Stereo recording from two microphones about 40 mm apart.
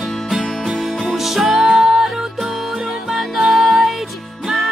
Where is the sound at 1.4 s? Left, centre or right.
Centre.